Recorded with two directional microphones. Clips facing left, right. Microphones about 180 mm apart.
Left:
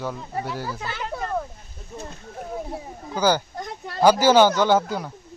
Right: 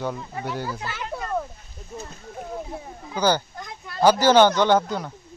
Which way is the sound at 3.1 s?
10° left (ahead or behind).